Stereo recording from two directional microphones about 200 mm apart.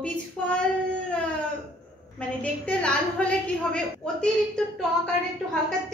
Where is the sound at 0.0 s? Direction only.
5° left (ahead or behind).